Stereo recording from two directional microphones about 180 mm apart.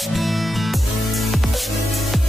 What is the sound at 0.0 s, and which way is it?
Music, centre (ahead or behind).